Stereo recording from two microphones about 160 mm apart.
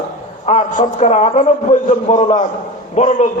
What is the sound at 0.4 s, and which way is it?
A man's voice, 50° left (ahead or behind).